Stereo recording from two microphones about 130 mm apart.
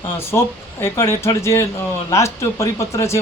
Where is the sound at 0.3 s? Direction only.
20° left (ahead or behind).